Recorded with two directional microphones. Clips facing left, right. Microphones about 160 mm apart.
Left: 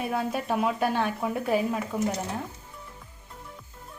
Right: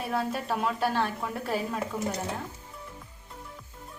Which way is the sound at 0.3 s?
10° left (ahead or behind).